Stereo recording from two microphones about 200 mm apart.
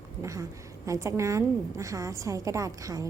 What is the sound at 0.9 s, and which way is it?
A woman's voice, 15° right (ahead or behind).